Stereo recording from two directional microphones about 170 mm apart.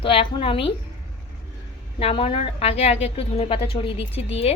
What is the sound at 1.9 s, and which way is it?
A woman's voice, 35° left (ahead or behind).